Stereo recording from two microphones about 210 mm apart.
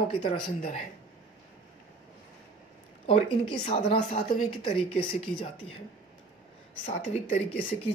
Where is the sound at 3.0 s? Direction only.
25° left (ahead or behind).